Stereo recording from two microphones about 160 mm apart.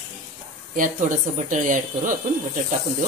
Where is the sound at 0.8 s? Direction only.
55° right (ahead or behind).